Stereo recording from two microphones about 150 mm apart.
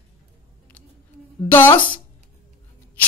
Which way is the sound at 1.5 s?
15° left (ahead or behind).